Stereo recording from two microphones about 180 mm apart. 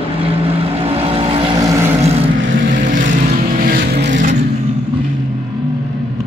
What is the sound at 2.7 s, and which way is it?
Vehicle, 45° right (ahead or behind).